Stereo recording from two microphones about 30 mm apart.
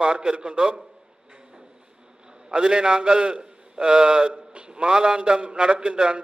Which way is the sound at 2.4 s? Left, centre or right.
Right.